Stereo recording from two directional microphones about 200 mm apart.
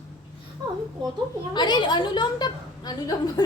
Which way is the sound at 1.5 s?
20° left (ahead or behind).